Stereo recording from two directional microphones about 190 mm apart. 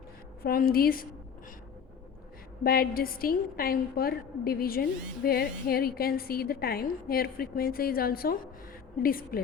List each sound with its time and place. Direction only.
0.4 s a woman's voice: 50° left (ahead or behind)
2.6 s a woman's voice: 50° left (ahead or behind)